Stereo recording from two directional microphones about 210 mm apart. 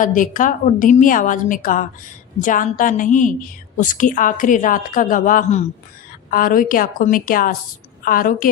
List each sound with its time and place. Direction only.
0.0 s a woman's voice: 40° left (ahead or behind)